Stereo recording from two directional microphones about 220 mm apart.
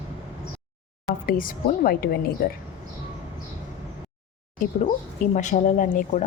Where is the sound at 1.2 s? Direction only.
40° left (ahead or behind).